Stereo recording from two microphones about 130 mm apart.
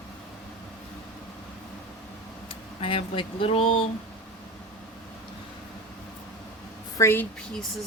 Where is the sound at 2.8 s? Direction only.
45° left (ahead or behind).